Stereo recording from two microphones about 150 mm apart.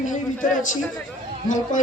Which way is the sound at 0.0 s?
55° left (ahead or behind).